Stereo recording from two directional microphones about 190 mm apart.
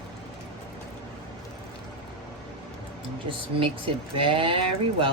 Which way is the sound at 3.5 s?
25° right (ahead or behind).